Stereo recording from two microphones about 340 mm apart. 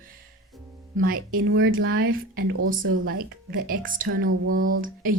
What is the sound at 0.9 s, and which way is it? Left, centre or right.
Speech, right.